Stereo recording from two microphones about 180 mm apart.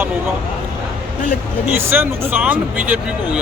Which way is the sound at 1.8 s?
10° right (ahead or behind).